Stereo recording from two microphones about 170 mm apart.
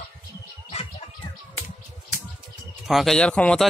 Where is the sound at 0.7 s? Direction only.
35° left (ahead or behind).